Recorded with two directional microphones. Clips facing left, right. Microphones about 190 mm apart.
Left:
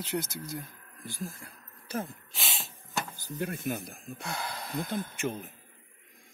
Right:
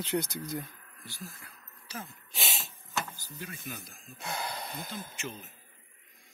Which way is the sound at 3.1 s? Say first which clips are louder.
Left 10 dB; 55° left (ahead or behind).